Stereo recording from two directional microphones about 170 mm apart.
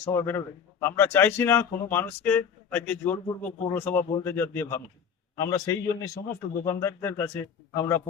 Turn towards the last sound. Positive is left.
turn(degrees=15)  # may be behind; listen again after turning